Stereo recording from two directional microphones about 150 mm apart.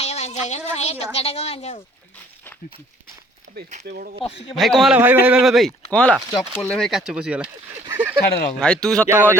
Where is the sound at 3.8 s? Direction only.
70° right (ahead or behind).